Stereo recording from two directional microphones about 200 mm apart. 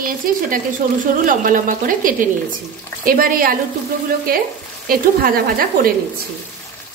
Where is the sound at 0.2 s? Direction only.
45° right (ahead or behind).